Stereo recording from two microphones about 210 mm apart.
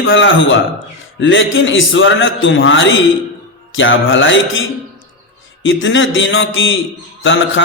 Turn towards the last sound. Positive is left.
turn(degrees=65)  # may be behind; listen again after turning